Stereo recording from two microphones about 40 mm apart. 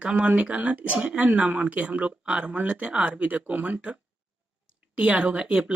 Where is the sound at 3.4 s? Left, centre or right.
Right.